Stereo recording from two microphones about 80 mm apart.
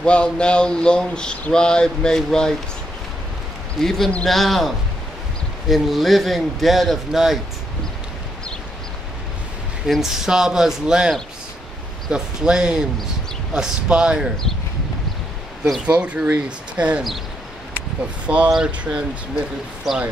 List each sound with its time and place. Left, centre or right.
0.0 s a sound: centre
3.8 s speech: centre
9.8 s speech: centre
15.8 s speech: centre
18.2 s speech: centre